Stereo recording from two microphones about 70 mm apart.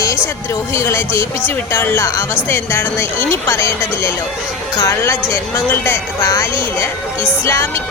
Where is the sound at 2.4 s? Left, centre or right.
Left.